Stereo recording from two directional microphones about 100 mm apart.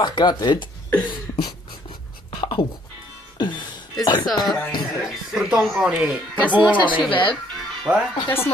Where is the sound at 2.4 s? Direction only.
45° left (ahead or behind).